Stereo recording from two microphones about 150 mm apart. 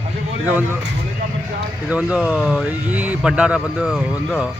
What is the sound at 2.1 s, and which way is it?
Speech, 5° right (ahead or behind).